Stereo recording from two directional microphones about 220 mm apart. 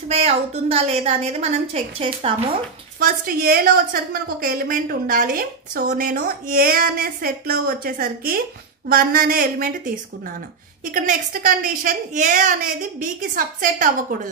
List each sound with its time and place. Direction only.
0.1 s a woman's voice: 30° right (ahead or behind)
3.0 s a woman's voice: 40° right (ahead or behind)